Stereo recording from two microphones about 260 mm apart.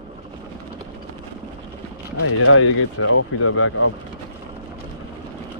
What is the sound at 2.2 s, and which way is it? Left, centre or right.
Speech, left.